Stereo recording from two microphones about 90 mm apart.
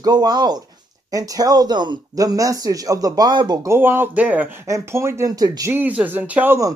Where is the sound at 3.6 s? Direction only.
25° right (ahead or behind).